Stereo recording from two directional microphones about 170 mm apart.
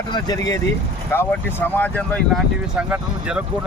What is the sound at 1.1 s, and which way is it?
Speech, 10° left (ahead or behind).